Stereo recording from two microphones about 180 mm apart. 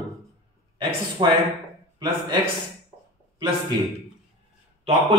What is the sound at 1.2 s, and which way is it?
Speech, 25° right (ahead or behind).